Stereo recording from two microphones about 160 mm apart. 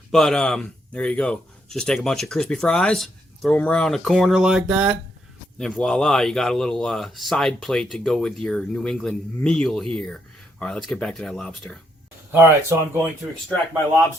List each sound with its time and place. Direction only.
0.1 s speech: 5° left (ahead or behind)
12.3 s speech: 15° right (ahead or behind)